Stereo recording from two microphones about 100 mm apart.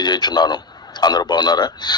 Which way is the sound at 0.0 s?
45° left (ahead or behind).